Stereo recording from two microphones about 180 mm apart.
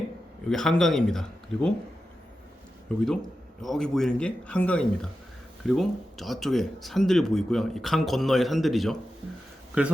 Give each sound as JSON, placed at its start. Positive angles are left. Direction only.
{"t": 0.4, "sound": "speech", "side_deg": 5}
{"t": 2.9, "sound": "speech", "side_deg": 5}